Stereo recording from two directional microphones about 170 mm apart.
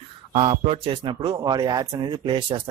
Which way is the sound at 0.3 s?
35° right (ahead or behind).